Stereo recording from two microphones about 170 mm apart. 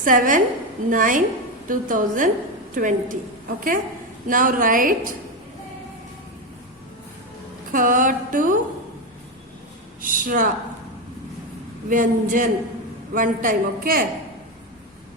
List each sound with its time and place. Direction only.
0.0 s a woman's voice: 50° right (ahead or behind)
7.7 s a woman's voice: 55° right (ahead or behind)
10.0 s a woman's voice: 55° right (ahead or behind)
11.9 s a woman's voice: 50° right (ahead or behind)